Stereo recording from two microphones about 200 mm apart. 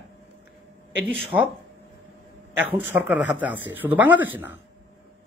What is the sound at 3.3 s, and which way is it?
A man's voice, 10° right (ahead or behind).